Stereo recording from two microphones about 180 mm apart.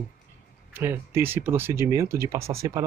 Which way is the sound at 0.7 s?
15° right (ahead or behind).